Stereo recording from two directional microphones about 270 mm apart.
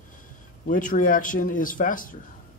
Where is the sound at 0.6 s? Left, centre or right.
Left.